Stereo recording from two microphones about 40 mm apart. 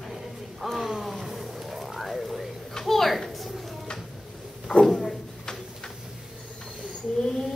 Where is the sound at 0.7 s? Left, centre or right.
Centre.